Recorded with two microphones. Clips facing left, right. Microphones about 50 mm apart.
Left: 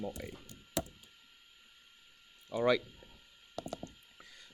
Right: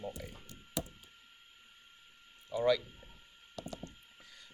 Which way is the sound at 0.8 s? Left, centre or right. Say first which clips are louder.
Left 2 dB; left.